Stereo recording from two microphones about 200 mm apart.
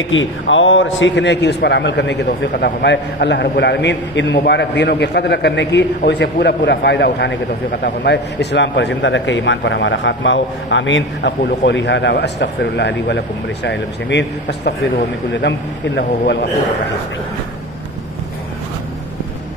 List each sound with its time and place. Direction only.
0.1 s a man's voice: 70° left (ahead or behind)